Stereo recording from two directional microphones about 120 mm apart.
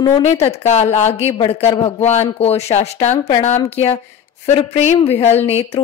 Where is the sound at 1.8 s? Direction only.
65° left (ahead or behind).